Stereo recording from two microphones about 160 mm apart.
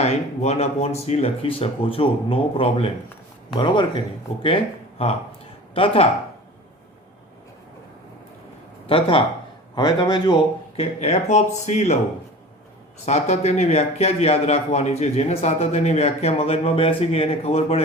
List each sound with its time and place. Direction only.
0.0 s speech: 40° left (ahead or behind)
8.9 s a man's voice: 35° left (ahead or behind)
10.8 s speech: 40° left (ahead or behind)
13.1 s speech: 45° left (ahead or behind)